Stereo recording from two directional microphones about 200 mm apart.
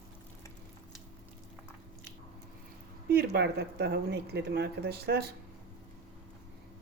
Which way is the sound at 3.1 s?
55° right (ahead or behind).